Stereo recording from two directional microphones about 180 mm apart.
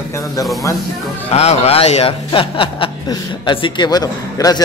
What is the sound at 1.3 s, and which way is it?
A man's voice, 35° left (ahead or behind).